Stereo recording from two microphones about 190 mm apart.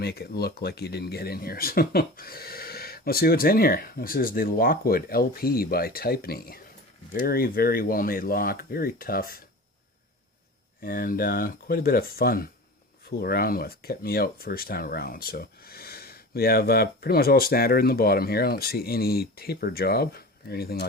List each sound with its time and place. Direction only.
0.0 s speech: 55° left (ahead or behind)
10.8 s speech: 50° left (ahead or behind)